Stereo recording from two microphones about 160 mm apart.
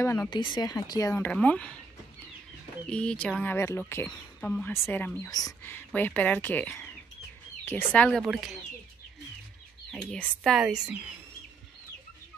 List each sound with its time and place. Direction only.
0.3 s speech: 30° left (ahead or behind); by 1.8 s 10° left (ahead or behind)
2.9 s speech: 5° left (ahead or behind)
9.8 s speech: 5° left (ahead or behind)